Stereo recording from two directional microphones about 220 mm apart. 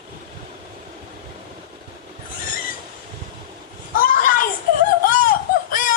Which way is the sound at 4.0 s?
40° left (ahead or behind).